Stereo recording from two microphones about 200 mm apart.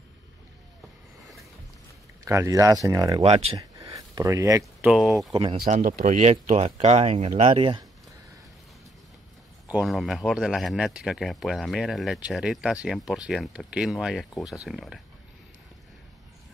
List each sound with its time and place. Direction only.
2.2 s speech: 15° right (ahead or behind)
3.5 s a sound: 20° right (ahead or behind)
4.8 s a man's voice: 5° right (ahead or behind)
5.3 s speech: 25° right (ahead or behind)
5.7 s speech: 40° right (ahead or behind)
9.7 s a man's voice: 5° right (ahead or behind)